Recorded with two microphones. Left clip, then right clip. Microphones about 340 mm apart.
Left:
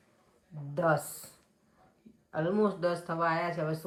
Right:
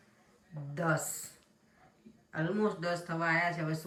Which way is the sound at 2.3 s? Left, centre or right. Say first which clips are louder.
Left 4 dB; centre.